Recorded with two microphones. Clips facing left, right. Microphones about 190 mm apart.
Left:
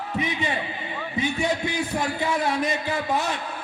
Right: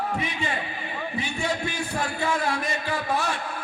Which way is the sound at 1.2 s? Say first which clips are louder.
Left 5 dB; 20° left (ahead or behind).